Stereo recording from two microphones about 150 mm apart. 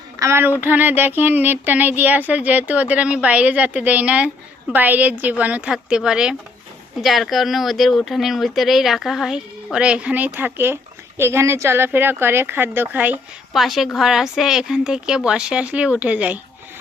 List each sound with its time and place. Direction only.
0.2 s speech: 15° right (ahead or behind)
13.5 s speech: centre (ahead or behind)